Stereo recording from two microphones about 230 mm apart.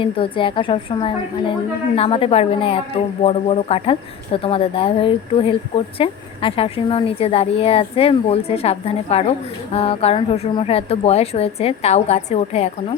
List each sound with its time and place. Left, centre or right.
0.0 s speech: left